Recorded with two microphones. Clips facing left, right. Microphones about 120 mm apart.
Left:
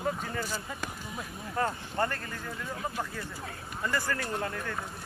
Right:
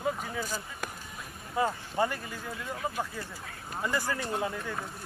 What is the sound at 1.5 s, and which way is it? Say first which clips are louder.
Speech: right 2 dB; 10° right (ahead or behind).